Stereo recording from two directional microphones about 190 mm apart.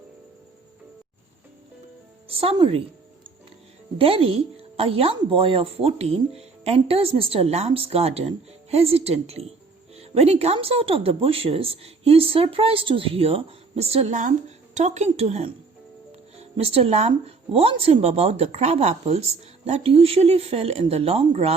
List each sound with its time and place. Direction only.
2.2 s a woman's voice: 30° right (ahead or behind)
3.9 s a woman's voice: 30° right (ahead or behind)